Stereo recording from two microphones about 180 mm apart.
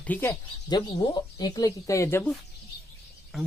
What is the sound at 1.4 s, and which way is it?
Speech, 20° left (ahead or behind).